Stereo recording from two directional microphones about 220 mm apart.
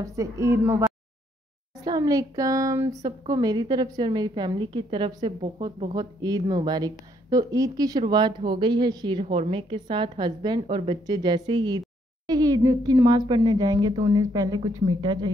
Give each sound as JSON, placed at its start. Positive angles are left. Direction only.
{"t": 0.0, "sound": "a woman's voice", "side_deg": -15}
{"t": 1.9, "sound": "a woman's voice", "side_deg": -15}